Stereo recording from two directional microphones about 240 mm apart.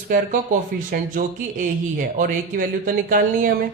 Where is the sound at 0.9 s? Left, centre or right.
Right.